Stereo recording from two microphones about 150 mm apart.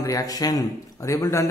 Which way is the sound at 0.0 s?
25° left (ahead or behind).